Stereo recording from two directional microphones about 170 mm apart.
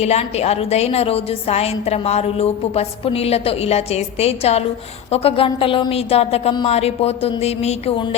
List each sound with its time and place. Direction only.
0.0 s a woman's voice: 40° left (ahead or behind)